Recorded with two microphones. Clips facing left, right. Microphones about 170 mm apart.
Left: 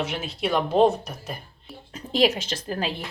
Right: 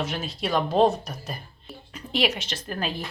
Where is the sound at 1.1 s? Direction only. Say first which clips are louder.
Even; 5° left (ahead or behind).